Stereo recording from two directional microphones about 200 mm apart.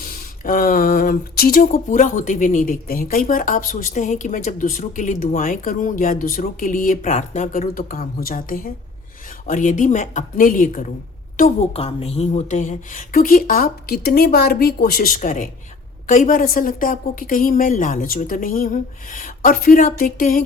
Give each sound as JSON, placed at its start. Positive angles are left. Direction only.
{"t": 0.0, "sound": "speech", "side_deg": 45}
{"t": 11.7, "sound": "speech", "side_deg": 30}